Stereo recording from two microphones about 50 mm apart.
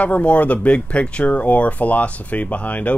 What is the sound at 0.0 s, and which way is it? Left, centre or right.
Speech, left.